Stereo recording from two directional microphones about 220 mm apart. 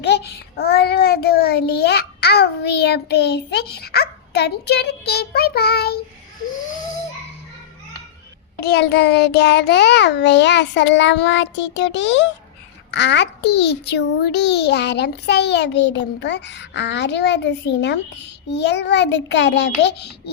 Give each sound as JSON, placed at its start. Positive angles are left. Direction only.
{"t": 0.0, "sound": "a child's voice", "side_deg": 50}
{"t": 8.6, "sound": "a child's voice", "side_deg": 50}